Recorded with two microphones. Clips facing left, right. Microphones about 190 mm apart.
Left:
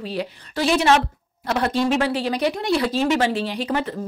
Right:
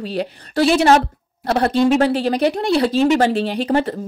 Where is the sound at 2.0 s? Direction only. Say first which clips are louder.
Right 5 dB; 50° right (ahead or behind).